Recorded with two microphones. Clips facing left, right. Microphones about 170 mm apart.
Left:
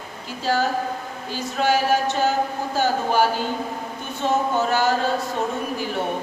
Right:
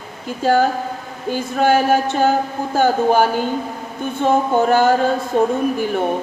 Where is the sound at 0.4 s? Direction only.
50° right (ahead or behind).